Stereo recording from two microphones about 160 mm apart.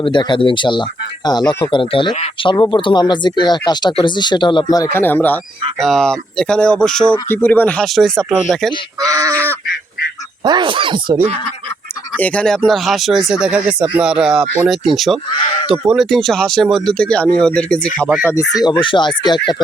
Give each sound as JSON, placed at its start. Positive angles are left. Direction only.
{"t": 0.0, "sound": "speech", "side_deg": 30}
{"t": 9.0, "sound": "speech", "side_deg": -20}
{"t": 10.4, "sound": "speech", "side_deg": -30}
{"t": 12.1, "sound": "speech", "side_deg": 10}
{"t": 18.5, "sound": "speech", "side_deg": 25}